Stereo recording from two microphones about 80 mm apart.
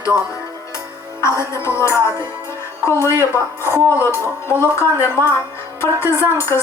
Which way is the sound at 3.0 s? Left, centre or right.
Left.